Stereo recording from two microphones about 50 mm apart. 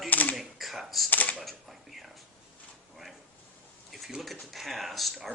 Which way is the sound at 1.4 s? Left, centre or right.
Centre.